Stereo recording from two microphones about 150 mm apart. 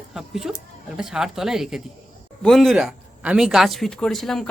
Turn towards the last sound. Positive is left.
turn(degrees=0)  # may be behind; listen again after turning